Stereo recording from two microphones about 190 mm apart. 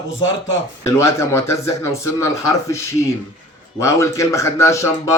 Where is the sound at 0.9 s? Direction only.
15° left (ahead or behind).